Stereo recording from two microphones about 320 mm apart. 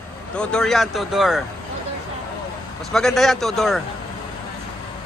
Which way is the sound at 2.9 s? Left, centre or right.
Centre.